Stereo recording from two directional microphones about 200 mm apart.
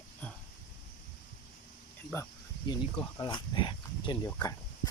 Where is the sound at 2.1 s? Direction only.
10° left (ahead or behind).